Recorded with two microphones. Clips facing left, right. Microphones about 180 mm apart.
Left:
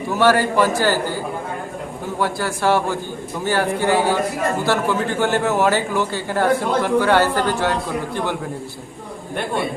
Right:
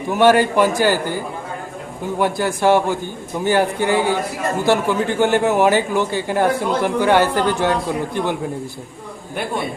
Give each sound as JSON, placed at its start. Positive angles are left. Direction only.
{"t": 0.1, "sound": "speech", "side_deg": -20}